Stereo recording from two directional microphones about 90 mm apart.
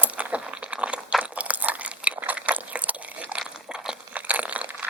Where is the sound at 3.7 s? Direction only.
10° right (ahead or behind).